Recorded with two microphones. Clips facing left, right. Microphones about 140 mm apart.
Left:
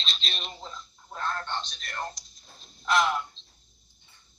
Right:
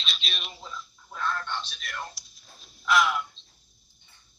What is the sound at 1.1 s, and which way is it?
Speech, 35° left (ahead or behind).